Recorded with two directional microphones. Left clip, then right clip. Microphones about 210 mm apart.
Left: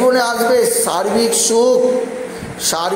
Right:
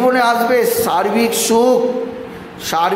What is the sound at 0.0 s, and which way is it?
A man's voice, 5° right (ahead or behind).